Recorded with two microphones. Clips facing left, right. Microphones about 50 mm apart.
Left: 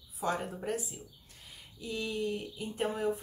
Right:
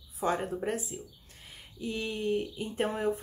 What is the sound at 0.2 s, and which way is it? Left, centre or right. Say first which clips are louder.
Speech: right 4 dB; right.